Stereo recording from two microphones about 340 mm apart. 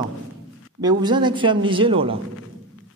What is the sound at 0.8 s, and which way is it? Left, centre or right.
A man's voice, centre.